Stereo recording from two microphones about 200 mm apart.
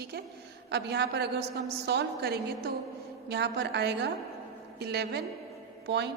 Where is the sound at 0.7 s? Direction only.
55° right (ahead or behind).